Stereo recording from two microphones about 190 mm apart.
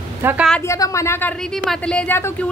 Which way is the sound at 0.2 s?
10° right (ahead or behind).